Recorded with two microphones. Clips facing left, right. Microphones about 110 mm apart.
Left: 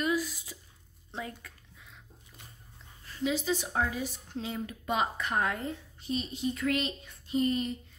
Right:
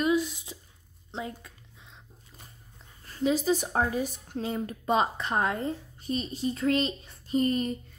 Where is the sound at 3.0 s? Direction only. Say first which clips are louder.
Right 5 dB; 40° right (ahead or behind).